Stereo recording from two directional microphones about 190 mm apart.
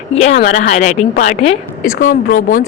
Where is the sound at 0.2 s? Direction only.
35° left (ahead or behind).